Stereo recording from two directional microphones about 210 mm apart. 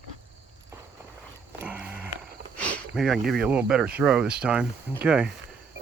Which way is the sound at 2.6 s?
5° left (ahead or behind).